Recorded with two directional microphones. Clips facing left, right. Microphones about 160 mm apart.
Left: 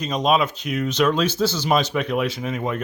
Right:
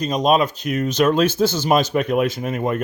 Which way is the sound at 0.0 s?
45° right (ahead or behind).